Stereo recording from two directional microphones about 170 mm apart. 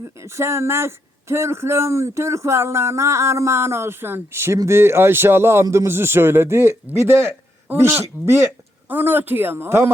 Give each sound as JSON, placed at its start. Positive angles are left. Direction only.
{"t": 0.2, "sound": "speech", "side_deg": -15}